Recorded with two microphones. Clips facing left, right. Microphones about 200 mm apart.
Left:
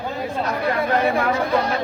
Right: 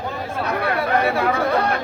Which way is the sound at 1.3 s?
60° right (ahead or behind).